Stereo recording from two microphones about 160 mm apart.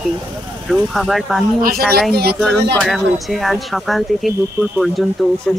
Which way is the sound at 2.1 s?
80° right.